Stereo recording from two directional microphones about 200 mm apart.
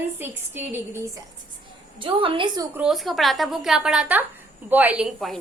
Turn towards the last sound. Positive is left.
turn(degrees=0)  # may be behind; listen again after turning